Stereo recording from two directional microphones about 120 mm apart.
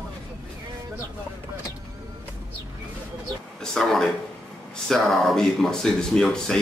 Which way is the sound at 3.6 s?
5° left (ahead or behind).